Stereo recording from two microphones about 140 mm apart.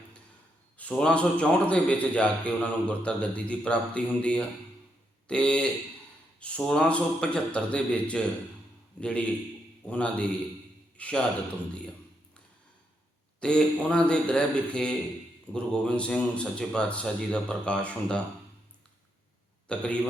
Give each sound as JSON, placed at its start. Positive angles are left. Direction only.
{"t": 0.8, "sound": "a man's voice", "side_deg": 5}
{"t": 13.4, "sound": "a man's voice", "side_deg": 5}
{"t": 19.6, "sound": "a man's voice", "side_deg": 5}